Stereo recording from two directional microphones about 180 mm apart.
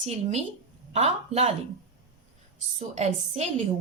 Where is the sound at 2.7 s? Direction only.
35° right (ahead or behind).